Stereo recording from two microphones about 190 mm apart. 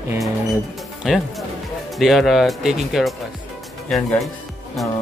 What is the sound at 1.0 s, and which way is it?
Speech, 5° right (ahead or behind).